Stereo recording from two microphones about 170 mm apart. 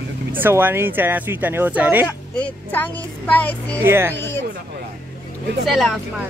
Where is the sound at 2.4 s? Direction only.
10° left (ahead or behind).